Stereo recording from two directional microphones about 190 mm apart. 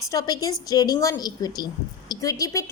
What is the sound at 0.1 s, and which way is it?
A woman's voice, 20° left (ahead or behind).